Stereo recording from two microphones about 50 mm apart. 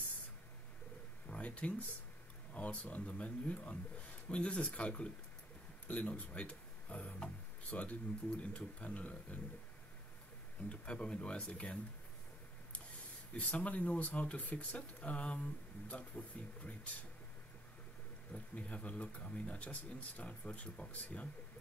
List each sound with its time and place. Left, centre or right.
1.3 s speech: left
10.7 s speech: left
13.4 s speech: left
18.3 s speech: left